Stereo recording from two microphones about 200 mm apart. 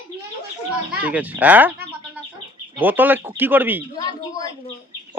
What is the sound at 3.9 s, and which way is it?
Speech, 20° left (ahead or behind).